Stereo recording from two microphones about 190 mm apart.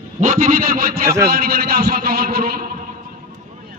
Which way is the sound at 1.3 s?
50° right (ahead or behind).